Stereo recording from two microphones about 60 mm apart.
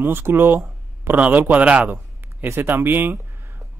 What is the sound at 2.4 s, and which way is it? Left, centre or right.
Speech, right.